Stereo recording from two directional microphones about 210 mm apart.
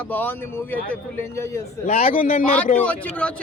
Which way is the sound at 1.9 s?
30° left (ahead or behind).